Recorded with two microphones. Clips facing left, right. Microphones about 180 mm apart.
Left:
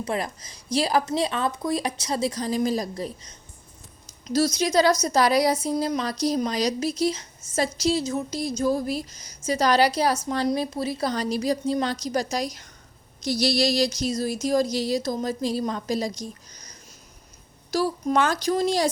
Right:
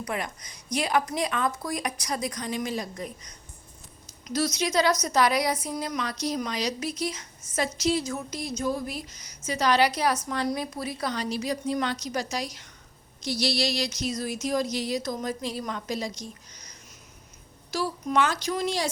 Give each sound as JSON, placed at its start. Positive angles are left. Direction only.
{"t": 0.0, "sound": "a woman's voice", "side_deg": 30}
{"t": 17.7, "sound": "speech", "side_deg": 40}